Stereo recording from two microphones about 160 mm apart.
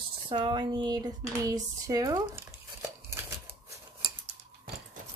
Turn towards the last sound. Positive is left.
turn(degrees=-15)  # may be behind; listen again after turning